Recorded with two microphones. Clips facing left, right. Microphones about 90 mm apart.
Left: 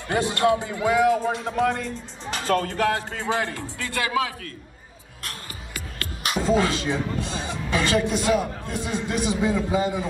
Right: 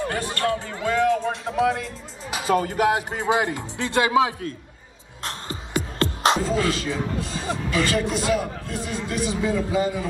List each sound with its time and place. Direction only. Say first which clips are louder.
0.1 s a man's voice: left 4 dB; 20° left (ahead or behind); by 4.6 s 25° right (ahead or behind)
5.2 s music: right 6 dB; 25° right (ahead or behind)
6.5 s a man's voice: left 2 dB; 20° left (ahead or behind)